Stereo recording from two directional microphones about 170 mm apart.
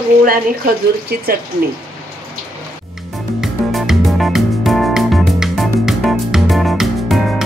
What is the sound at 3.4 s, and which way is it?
Music, centre (ahead or behind).